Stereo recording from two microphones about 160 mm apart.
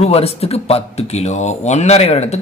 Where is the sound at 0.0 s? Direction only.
40° left (ahead or behind).